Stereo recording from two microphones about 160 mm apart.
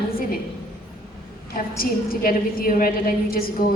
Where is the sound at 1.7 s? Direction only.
65° left (ahead or behind).